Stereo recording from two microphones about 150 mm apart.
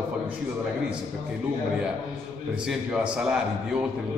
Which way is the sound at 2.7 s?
5° right (ahead or behind).